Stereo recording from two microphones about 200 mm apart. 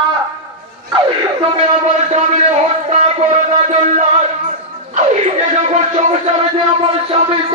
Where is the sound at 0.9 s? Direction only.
30° right (ahead or behind).